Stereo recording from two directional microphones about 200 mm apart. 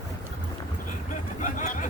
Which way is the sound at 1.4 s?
40° left (ahead or behind).